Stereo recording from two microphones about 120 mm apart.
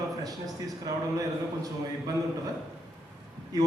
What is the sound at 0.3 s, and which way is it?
Speech, 30° right (ahead or behind).